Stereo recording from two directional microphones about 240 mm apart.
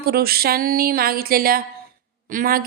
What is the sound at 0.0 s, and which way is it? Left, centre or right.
A woman's voice, right.